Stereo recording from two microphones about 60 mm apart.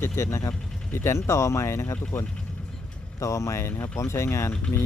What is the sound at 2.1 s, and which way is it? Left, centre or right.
Speech, left.